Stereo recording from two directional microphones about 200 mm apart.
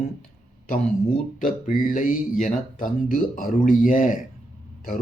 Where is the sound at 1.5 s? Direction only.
45° left (ahead or behind).